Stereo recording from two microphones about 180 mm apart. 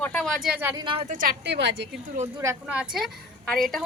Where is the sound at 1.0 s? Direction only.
50° right (ahead or behind); by 1.9 s 75° right (ahead or behind).